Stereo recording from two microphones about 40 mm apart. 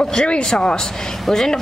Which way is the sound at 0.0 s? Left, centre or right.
Centre.